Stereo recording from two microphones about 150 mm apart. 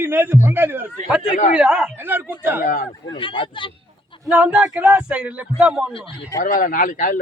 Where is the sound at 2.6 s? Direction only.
65° left (ahead or behind).